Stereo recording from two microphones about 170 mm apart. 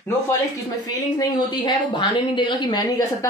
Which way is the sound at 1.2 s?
25° left (ahead or behind).